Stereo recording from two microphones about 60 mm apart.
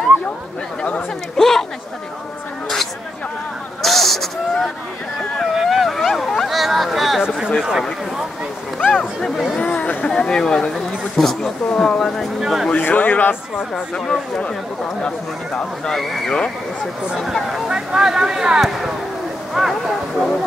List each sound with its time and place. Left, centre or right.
1.3 s chatter: centre
3.8 s a sound: centre
7.2 s a sound: centre
7.5 s speech: centre
9.2 s speech: centre
9.6 s a sound: centre
10.0 s speech: centre
12.4 s speech: centre
12.7 s speech: left
13.9 s speech: centre
16.0 s speech: centre
16.3 s speech: centre
17.2 s speech: centre
17.6 s speech: centre